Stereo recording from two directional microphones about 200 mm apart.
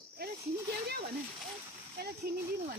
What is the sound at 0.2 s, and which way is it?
Snake, 50° right (ahead or behind).